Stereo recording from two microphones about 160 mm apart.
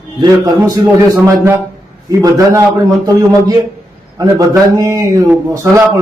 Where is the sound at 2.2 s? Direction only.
20° right (ahead or behind).